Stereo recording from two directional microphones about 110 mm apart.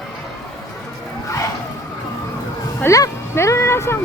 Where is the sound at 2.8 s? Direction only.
30° left (ahead or behind).